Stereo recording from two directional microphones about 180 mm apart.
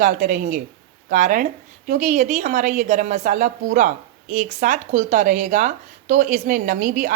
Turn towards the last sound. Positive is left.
turn(degrees=-50)  # may be behind; listen again after turning